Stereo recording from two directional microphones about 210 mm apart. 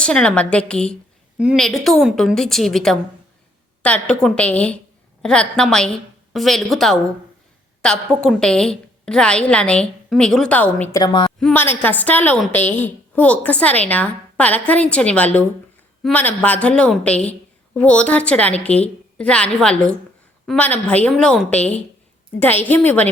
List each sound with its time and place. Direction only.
0.0 s a woman's voice: 5° left (ahead or behind)
10.9 s a woman's voice: 20° left (ahead or behind)
11.3 s a woman's voice: 5° left (ahead or behind)